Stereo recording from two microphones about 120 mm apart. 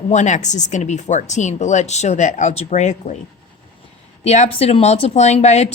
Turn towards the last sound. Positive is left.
turn(degrees=65)  # may be behind; listen again after turning